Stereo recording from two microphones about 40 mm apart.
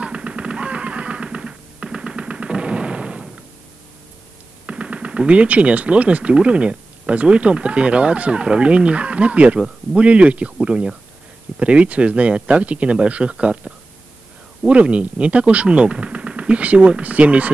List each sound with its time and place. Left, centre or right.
0.0 s machine gun: right
4.6 s speech: right
14.7 s speech: right